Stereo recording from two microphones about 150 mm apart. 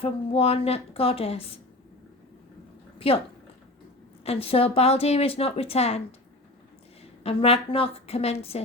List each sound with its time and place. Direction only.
0.0 s speech: 40° left (ahead or behind)
4.3 s speech: 40° left (ahead or behind)
7.3 s speech: 40° left (ahead or behind)